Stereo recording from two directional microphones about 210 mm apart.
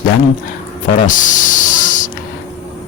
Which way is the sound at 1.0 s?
40° left (ahead or behind).